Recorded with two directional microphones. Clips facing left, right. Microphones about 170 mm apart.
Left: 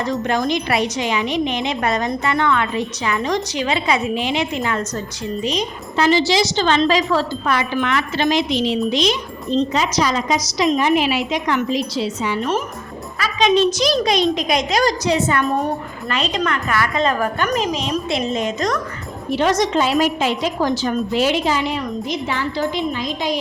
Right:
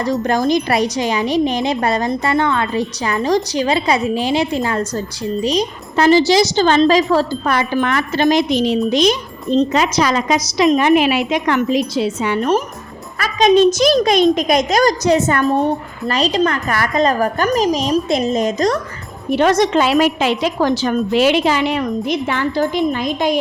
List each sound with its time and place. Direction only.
0.0 s a woman's voice: 35° right (ahead or behind)
9.7 s a woman's voice: 60° right (ahead or behind); by 15.4 s 45° right (ahead or behind)
15.5 s a woman's voice: 30° right (ahead or behind)
19.3 s a woman's voice: 55° right (ahead or behind)